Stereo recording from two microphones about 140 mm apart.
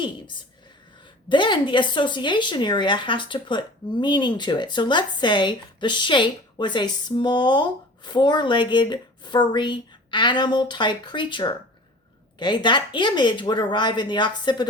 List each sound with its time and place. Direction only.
0.0 s speech: 35° left (ahead or behind)